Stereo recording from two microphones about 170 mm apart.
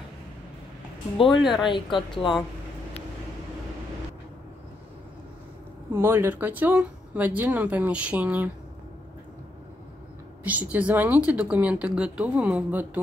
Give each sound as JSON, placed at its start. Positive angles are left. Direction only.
{"t": 1.2, "sound": "speech", "side_deg": 0}
{"t": 1.7, "sound": "a woman's voice", "side_deg": 30}
{"t": 5.9, "sound": "speech", "side_deg": -15}
{"t": 10.4, "sound": "speech", "side_deg": -10}